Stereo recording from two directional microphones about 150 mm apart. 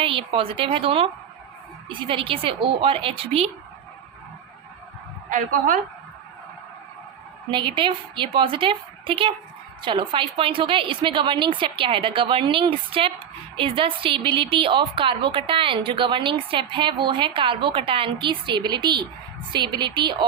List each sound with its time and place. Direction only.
0.0 s a woman's voice: 35° right (ahead or behind)
5.3 s a woman's voice: 60° right (ahead or behind)
7.5 s a woman's voice: 35° right (ahead or behind)